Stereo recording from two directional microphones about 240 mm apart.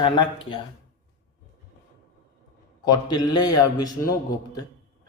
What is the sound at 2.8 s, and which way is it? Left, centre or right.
A man's voice, centre.